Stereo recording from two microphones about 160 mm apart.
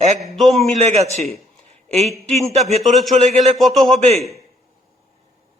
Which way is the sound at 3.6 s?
Centre (ahead or behind).